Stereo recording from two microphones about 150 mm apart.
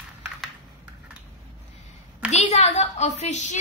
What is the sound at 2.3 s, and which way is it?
A woman's voice, 50° left (ahead or behind).